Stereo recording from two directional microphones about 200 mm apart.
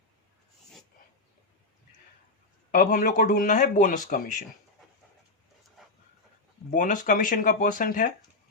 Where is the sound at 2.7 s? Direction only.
45° left (ahead or behind).